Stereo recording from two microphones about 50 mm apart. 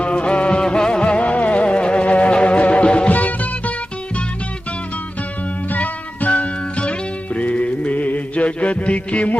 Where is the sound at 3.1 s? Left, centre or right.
Left.